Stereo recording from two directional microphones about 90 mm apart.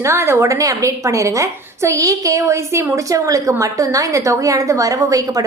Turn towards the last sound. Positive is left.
turn(degrees=-40)  # may be behind; listen again after turning